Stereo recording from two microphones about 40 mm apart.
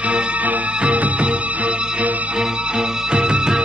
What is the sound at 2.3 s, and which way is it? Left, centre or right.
Music, right.